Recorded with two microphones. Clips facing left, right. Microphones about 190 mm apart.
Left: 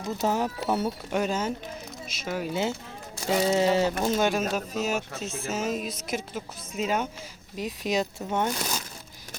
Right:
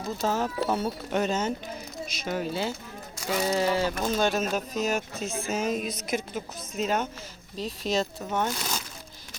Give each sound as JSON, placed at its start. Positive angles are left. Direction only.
{"t": 0.2, "sound": "speech", "side_deg": 15}
{"t": 2.5, "sound": "a sound", "side_deg": 20}
{"t": 4.0, "sound": "speech", "side_deg": 10}